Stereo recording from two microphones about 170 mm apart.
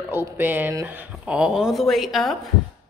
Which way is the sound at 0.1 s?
15° right (ahead or behind).